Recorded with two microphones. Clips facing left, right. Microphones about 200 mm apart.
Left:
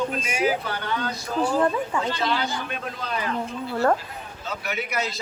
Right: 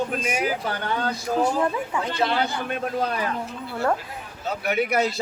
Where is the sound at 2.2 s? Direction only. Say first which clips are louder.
Right 6 dB; 55° right (ahead or behind).